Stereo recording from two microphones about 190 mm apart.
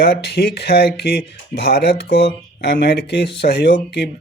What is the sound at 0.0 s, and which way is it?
Speech, 60° left (ahead or behind).